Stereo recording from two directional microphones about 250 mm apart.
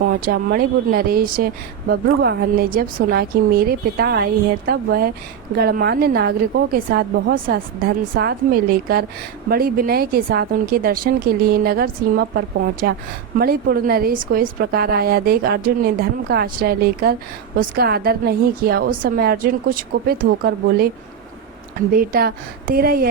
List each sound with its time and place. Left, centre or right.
0.0 s a woman's voice: right
13.4 s a woman's voice: right
21.9 s a woman's voice: right